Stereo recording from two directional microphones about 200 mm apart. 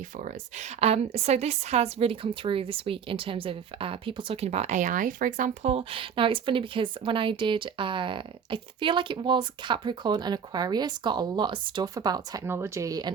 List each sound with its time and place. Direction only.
0.2 s a woman's voice: 35° right (ahead or behind); by 13.1 s 20° right (ahead or behind)